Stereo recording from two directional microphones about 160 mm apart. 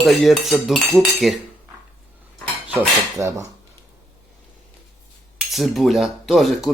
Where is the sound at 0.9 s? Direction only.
Centre (ahead or behind).